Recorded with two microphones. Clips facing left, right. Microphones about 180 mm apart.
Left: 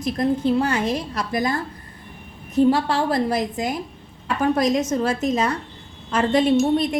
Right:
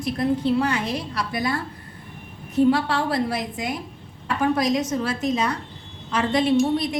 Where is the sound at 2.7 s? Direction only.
40° left (ahead or behind).